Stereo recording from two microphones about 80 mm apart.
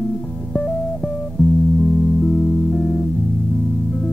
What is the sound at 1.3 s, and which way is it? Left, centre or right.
Music, centre.